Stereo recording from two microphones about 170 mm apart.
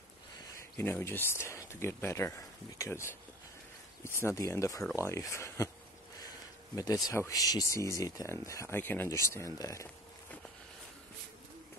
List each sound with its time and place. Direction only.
0.7 s speech: 15° left (ahead or behind)
6.2 s a sound: 20° left (ahead or behind)
7.1 s speech: 20° left (ahead or behind)